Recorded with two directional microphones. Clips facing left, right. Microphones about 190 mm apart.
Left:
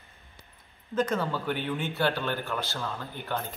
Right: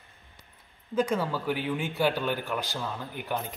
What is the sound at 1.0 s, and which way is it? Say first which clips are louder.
Speech: right 1 dB; 10° right (ahead or behind).